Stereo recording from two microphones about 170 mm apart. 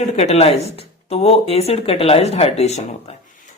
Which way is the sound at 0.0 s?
40° left (ahead or behind).